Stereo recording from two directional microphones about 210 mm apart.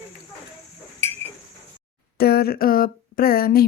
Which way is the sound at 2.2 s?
45° left (ahead or behind).